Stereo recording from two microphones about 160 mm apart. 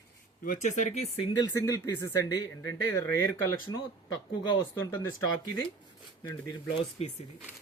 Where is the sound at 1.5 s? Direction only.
20° left (ahead or behind).